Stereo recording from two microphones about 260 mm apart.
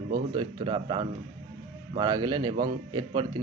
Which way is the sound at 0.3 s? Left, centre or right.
Centre.